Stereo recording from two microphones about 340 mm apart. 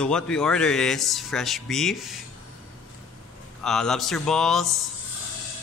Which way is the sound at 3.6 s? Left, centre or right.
Centre.